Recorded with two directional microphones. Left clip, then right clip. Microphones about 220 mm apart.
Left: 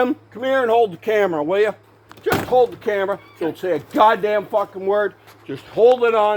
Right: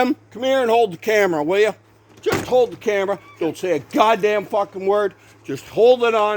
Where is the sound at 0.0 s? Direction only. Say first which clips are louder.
Right 1 dB; 40° right (ahead or behind).